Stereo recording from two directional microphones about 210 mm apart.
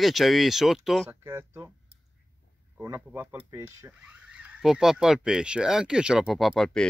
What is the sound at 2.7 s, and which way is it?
Speech, 10° right (ahead or behind).